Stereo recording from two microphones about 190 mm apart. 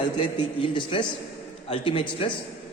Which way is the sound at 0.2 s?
25° left (ahead or behind).